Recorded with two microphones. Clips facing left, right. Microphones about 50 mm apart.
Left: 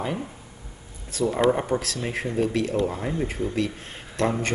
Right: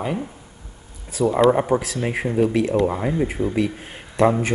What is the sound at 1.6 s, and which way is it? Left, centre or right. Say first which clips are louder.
Speech: right 6 dB; centre.